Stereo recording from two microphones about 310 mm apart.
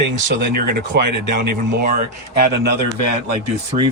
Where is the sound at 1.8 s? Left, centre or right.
Right.